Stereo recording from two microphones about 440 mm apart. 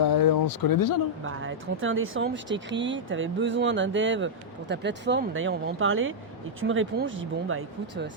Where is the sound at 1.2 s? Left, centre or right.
Right.